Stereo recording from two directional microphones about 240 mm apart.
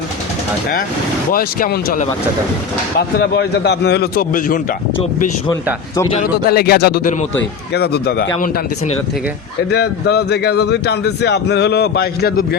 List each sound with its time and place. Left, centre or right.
1.3 s a man's voice: left
3.2 s a man's voice: left
7.3 s a man's voice: left
9.7 s speech: left